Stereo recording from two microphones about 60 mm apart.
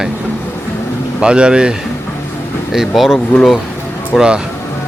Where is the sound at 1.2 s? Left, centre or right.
Centre.